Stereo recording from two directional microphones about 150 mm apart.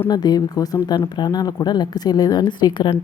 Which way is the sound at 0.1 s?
25° left (ahead or behind).